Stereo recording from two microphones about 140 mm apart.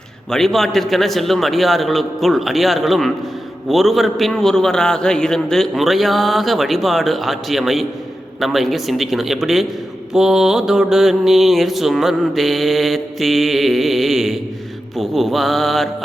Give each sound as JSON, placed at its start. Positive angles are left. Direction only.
{"t": 0.3, "sound": "mantra", "side_deg": 0}